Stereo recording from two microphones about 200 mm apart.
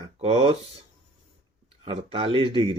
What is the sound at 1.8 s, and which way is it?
Speech, 25° right (ahead or behind).